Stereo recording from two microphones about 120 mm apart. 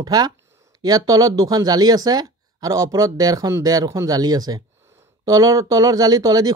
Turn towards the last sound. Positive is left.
turn(degrees=-30)  # may be behind; listen again after turning